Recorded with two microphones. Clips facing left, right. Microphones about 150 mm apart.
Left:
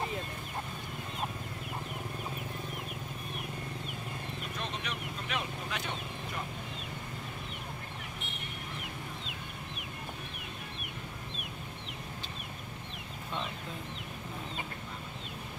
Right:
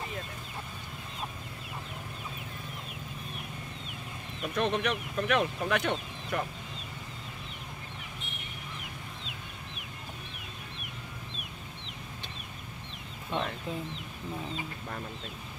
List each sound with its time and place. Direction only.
4.6 s speech: 60° right (ahead or behind)